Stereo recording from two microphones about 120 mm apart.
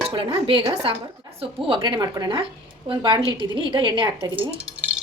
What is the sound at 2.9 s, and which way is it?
Speech, 45° right (ahead or behind).